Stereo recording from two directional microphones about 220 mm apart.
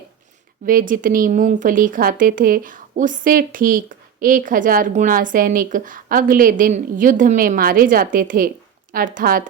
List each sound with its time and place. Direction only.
0.6 s speech: 40° right (ahead or behind)